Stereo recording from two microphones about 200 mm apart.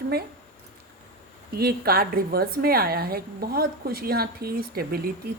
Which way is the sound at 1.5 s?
50° right (ahead or behind).